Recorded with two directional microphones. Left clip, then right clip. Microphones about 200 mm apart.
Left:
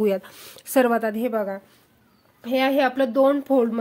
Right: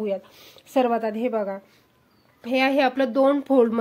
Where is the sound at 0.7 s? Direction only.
10° left (ahead or behind); by 3.8 s 15° right (ahead or behind).